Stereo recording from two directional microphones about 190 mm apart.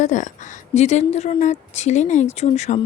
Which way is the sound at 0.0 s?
40° left (ahead or behind).